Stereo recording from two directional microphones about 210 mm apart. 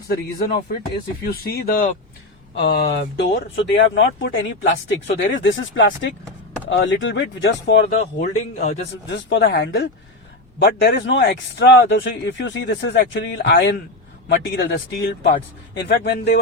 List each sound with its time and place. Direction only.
0.1 s speech: 45° left (ahead or behind)
8.2 s a man's voice: 35° left (ahead or behind)
9.0 s speech: 60° left (ahead or behind)